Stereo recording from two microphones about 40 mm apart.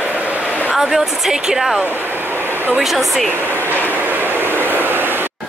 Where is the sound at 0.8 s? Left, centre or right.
Centre.